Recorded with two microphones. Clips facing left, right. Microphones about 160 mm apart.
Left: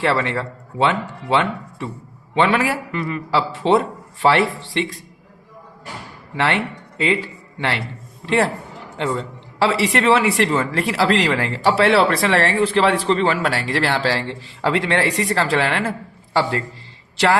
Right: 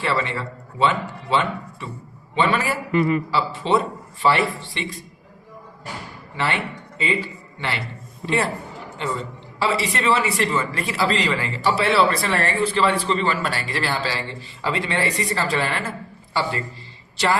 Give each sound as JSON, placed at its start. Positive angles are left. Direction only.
{"t": 0.0, "sound": "a man's voice", "side_deg": 70}
{"t": 2.9, "sound": "a man's voice", "side_deg": -20}
{"t": 3.3, "sound": "a man's voice", "side_deg": 70}
{"t": 6.3, "sound": "speech", "side_deg": 75}
{"t": 9.6, "sound": "a man's voice", "side_deg": 85}